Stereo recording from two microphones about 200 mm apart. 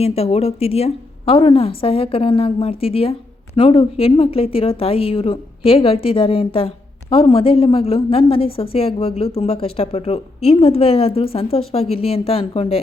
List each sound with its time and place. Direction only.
0.0 s a woman's voice: 30° left (ahead or behind)